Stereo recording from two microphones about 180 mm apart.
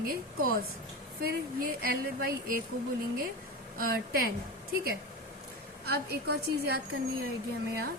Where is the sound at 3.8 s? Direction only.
55° right (ahead or behind).